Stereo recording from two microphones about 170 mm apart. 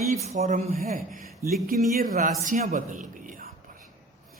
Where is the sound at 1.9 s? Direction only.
55° right (ahead or behind).